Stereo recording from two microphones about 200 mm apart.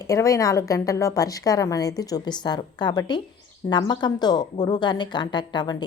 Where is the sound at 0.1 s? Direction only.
15° left (ahead or behind).